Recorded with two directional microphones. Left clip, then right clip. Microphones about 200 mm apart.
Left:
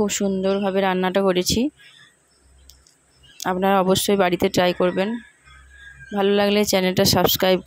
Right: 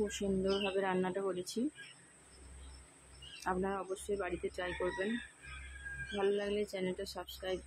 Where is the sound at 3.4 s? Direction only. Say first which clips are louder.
Left 18 dB; 45° left (ahead or behind).